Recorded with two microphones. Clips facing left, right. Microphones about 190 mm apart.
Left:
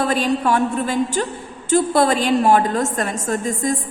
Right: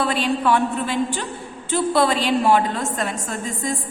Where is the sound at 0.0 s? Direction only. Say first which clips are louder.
Left 2 dB; 45° left (ahead or behind).